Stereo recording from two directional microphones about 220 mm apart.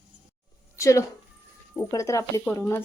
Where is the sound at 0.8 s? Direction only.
15° left (ahead or behind).